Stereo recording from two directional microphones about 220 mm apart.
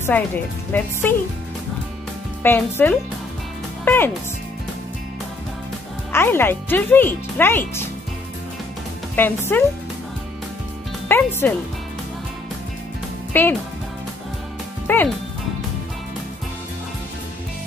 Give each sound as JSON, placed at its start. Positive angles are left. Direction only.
{"t": 0.0, "sound": "speech", "side_deg": 10}
{"t": 2.4, "sound": "speech", "side_deg": 10}
{"t": 6.1, "sound": "speech", "side_deg": 10}
{"t": 9.1, "sound": "speech", "side_deg": 10}
{"t": 11.1, "sound": "speech", "side_deg": 10}
{"t": 13.3, "sound": "speech", "side_deg": 10}
{"t": 14.9, "sound": "speech", "side_deg": 10}